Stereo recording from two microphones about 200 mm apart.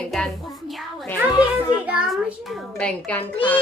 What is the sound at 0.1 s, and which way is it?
A child's voice, centre (ahead or behind).